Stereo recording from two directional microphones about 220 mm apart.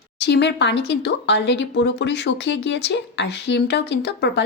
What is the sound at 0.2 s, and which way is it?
Speech, 50° left (ahead or behind).